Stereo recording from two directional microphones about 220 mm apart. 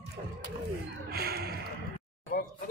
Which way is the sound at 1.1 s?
45° right (ahead or behind).